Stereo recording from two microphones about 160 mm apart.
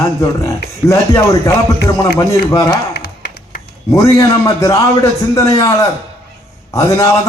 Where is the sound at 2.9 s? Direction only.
90° left.